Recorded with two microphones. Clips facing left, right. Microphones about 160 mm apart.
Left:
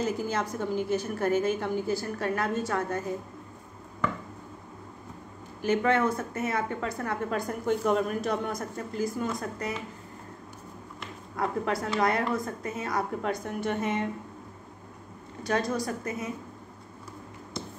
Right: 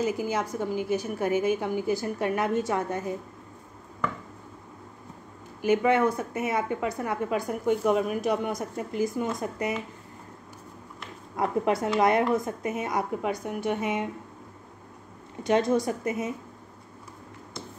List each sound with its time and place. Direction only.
0.0 s a woman's voice: 10° right (ahead or behind)
5.6 s a woman's voice: 10° right (ahead or behind)
11.3 s a woman's voice: 20° right (ahead or behind)
15.4 s a woman's voice: 20° right (ahead or behind)